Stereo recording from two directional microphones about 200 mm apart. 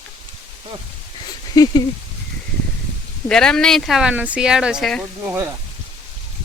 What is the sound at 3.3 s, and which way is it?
Speech, 5° left (ahead or behind).